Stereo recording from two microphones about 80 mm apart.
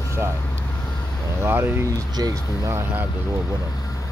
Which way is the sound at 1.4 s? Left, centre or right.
Right.